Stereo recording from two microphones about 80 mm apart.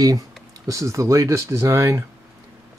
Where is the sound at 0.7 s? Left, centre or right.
Right.